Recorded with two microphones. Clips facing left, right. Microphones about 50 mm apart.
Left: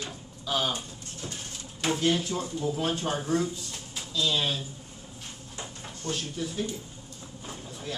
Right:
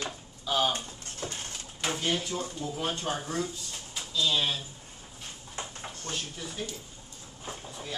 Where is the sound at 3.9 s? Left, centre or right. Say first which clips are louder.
Even; centre.